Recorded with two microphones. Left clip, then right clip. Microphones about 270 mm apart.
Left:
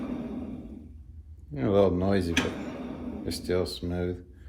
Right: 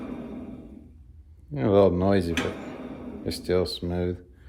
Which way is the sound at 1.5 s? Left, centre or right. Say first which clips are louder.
Right 4 dB; right.